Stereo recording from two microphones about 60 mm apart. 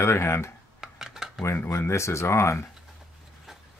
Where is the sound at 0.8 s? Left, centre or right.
Centre.